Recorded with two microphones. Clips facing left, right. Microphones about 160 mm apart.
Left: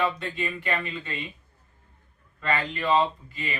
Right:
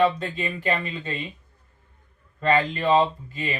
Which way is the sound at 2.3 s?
35° right (ahead or behind).